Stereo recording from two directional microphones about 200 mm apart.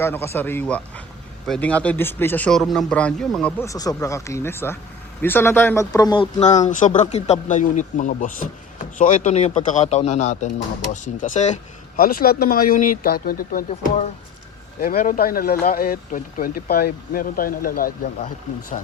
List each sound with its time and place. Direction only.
0.0 s a man's voice: 15° left (ahead or behind)
3.7 s speech: 15° left (ahead or behind)
6.7 s speech: 40° left (ahead or behind)
13.7 s speech: 35° left (ahead or behind)
14.8 s speech: 45° left (ahead or behind)